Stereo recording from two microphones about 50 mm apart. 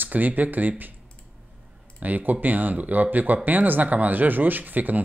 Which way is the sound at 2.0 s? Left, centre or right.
Right.